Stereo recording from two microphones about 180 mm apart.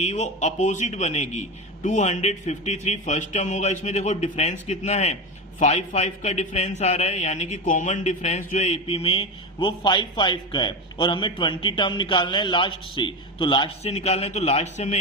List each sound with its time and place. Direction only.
0.0 s a man's voice: 40° left (ahead or behind)